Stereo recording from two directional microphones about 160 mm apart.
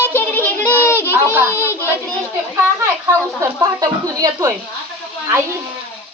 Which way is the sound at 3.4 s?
20° right (ahead or behind).